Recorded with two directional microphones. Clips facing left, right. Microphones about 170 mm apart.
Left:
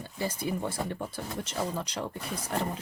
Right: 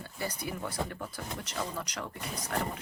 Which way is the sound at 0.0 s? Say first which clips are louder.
Left 4 dB; 25° left (ahead or behind).